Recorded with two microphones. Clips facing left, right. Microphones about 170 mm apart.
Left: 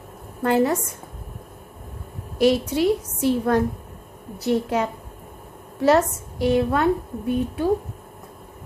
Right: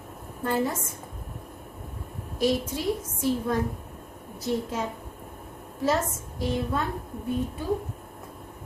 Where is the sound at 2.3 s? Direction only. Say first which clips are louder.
Left 7 dB; 70° left (ahead or behind).